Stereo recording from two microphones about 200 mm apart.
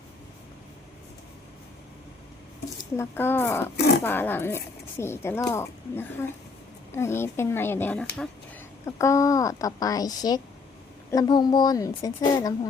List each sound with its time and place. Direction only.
2.9 s a woman's voice: 10° left (ahead or behind)
3.8 s speech: 55° left (ahead or behind)
4.0 s a woman's voice: 10° left (ahead or behind)